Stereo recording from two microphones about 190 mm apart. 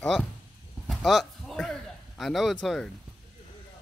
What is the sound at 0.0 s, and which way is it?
Speech, 5° left (ahead or behind).